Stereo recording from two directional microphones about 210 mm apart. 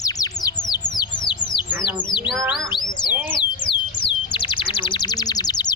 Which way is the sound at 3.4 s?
20° left (ahead or behind).